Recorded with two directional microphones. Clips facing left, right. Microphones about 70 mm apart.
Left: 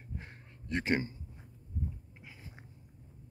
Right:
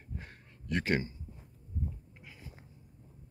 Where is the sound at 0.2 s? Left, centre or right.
Left.